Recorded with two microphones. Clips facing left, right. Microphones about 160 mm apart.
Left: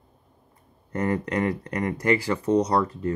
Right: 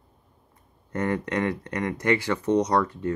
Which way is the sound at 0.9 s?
30° left (ahead or behind).